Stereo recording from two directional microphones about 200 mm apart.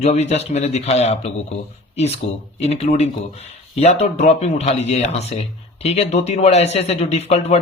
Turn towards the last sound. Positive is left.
turn(degrees=35)  # may be behind; listen again after turning